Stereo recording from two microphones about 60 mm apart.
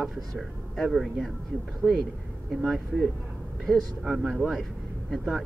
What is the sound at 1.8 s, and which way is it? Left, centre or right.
Speech, left.